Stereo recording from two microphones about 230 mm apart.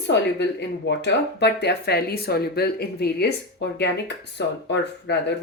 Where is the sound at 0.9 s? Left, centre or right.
Left.